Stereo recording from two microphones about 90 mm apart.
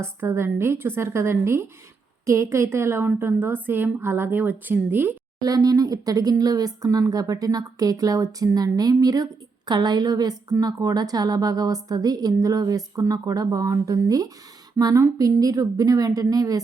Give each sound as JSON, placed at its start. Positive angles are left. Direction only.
{"t": 0.0, "sound": "a woman's voice", "side_deg": -25}
{"t": 5.4, "sound": "speech", "side_deg": -45}